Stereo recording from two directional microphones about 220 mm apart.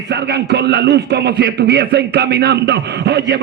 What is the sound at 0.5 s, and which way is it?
Speech, 50° right (ahead or behind).